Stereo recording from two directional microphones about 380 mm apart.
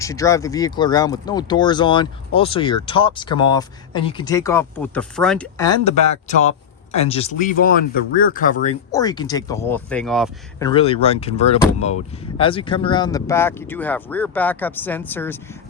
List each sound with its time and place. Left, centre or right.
0.0 s speech: centre
10.7 s speech: centre